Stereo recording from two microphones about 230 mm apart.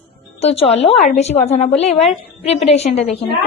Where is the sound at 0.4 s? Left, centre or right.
Left.